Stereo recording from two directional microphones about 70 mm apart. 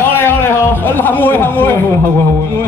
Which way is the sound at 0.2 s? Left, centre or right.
Left.